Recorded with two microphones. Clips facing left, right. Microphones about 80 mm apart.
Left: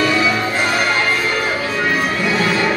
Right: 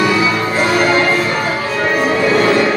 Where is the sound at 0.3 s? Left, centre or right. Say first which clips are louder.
Right 3 dB; centre.